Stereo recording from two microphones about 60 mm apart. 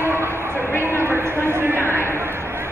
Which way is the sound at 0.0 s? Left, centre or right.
Right.